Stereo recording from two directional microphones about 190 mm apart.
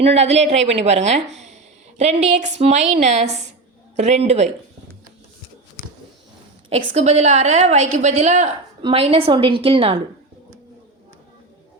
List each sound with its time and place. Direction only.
0.0 s a woman's voice: 35° right (ahead or behind)
6.7 s a woman's voice: 35° right (ahead or behind)